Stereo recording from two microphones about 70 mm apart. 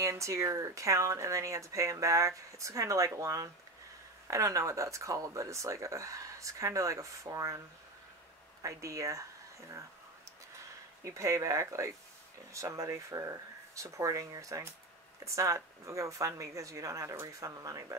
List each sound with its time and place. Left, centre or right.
0.0 s speech: right
8.6 s speech: right
11.1 s speech: right